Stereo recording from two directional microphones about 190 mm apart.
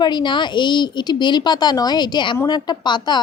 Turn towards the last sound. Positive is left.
turn(degrees=25)  # may be behind; listen again after turning